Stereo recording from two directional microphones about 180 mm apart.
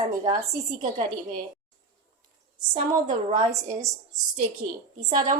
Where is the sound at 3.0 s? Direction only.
45° right (ahead or behind).